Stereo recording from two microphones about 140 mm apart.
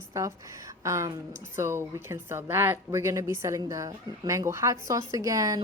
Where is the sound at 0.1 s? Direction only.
20° right (ahead or behind).